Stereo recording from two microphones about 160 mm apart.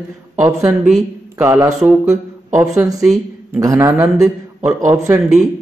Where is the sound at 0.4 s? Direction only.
15° right (ahead or behind).